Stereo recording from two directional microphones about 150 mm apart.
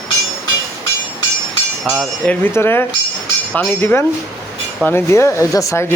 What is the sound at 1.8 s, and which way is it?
Speech, 5° right (ahead or behind).